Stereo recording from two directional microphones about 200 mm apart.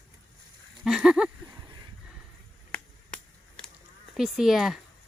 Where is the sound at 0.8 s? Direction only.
5° right (ahead or behind).